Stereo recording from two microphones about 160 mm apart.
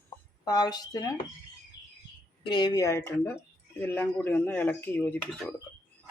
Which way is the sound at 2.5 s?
25° left (ahead or behind).